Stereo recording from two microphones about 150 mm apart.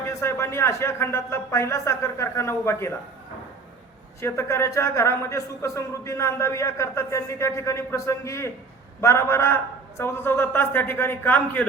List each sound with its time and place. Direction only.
0.0 s a man's voice: 20° left (ahead or behind)
4.2 s a man's voice: 20° left (ahead or behind)